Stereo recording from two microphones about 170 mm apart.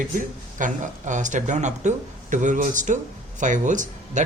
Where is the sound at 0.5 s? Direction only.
50° right (ahead or behind).